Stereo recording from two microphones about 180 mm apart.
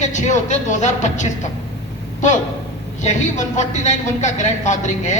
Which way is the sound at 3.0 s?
40° left (ahead or behind).